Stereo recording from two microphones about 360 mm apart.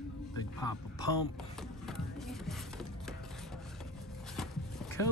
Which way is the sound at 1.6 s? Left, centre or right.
Centre.